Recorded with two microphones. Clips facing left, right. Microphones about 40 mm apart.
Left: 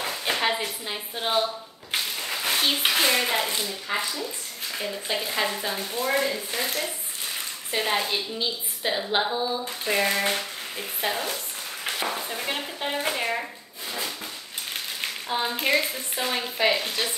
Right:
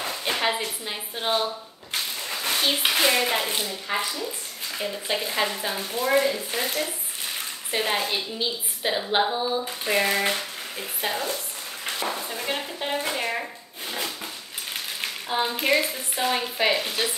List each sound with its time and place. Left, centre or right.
0.2 s speech: centre
1.9 s a sound: centre
3.4 s speech: right
5.2 s a sound: centre
6.0 s speech: centre
7.7 s a sound: centre
11.8 s speech: centre
13.1 s chopping: centre
14.7 s a woman's voice: centre